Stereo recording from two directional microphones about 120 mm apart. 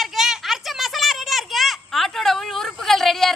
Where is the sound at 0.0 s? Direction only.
5° right (ahead or behind).